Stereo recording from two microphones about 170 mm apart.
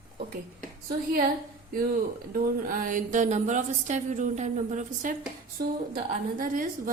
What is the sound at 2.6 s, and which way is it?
A woman's voice, 50° right (ahead or behind).